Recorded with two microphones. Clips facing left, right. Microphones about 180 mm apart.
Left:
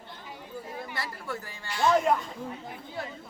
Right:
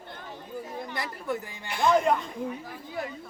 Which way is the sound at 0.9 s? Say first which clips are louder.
Right 6 dB; 15° right (ahead or behind).